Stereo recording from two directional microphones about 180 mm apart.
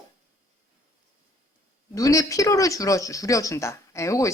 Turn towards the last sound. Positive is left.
turn(degrees=15)  # may be behind; listen again after turning